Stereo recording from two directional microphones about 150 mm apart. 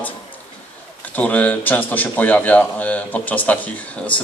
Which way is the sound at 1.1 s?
10° left (ahead or behind).